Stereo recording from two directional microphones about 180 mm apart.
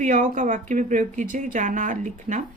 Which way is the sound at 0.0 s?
45° right (ahead or behind).